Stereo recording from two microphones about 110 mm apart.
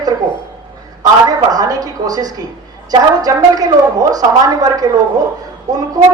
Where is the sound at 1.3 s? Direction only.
35° right (ahead or behind).